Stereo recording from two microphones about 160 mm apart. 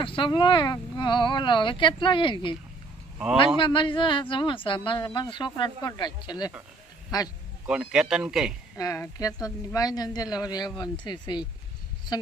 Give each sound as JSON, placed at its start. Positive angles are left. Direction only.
{"t": 0.0, "sound": "speech", "side_deg": 30}
{"t": 3.6, "sound": "speech", "side_deg": 30}
{"t": 7.7, "sound": "speech", "side_deg": -5}
{"t": 8.8, "sound": "speech", "side_deg": 20}